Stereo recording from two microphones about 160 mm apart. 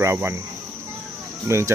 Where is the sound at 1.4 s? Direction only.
20° right (ahead or behind).